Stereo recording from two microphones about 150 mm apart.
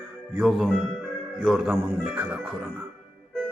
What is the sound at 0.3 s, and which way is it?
A man's voice, 5° right (ahead or behind).